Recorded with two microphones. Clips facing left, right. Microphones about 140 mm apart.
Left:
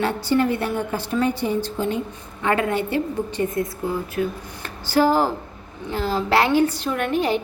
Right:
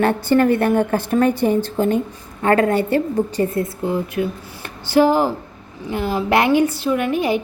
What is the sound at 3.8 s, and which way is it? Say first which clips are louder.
A woman's voice: right 4 dB; 25° right (ahead or behind).